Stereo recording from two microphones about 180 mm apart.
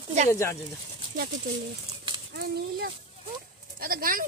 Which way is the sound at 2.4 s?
60° right (ahead or behind).